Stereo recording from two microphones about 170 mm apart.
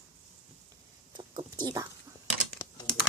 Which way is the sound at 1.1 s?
25° right (ahead or behind).